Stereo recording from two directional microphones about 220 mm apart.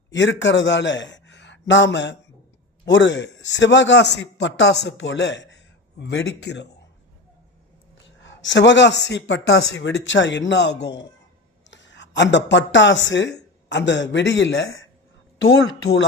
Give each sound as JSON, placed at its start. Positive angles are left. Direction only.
{"t": 0.1, "sound": "a man's voice", "side_deg": 55}
{"t": 8.2, "sound": "a man's voice", "side_deg": 55}